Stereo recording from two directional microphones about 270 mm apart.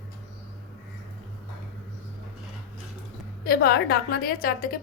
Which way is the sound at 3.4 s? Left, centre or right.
Left.